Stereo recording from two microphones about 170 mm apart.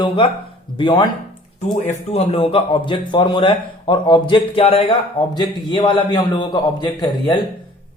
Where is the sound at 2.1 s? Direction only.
35° left (ahead or behind).